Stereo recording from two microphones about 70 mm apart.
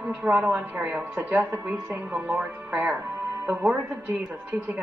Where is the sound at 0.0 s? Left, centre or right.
Right.